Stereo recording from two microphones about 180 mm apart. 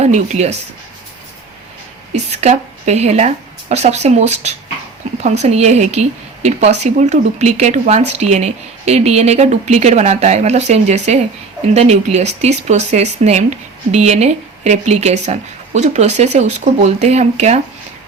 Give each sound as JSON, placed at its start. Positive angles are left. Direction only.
{"t": 0.0, "sound": "speech", "side_deg": -40}
{"t": 2.1, "sound": "a woman's voice", "side_deg": -35}